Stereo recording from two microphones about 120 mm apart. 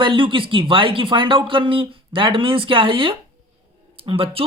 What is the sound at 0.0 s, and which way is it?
Speech, 45° right (ahead or behind).